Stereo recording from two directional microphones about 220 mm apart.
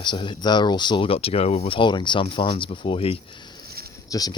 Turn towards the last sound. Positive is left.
turn(degrees=15)  # may be behind; listen again after turning